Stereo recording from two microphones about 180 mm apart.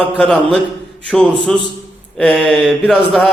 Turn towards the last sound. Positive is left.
turn(degrees=0)  # may be behind; listen again after turning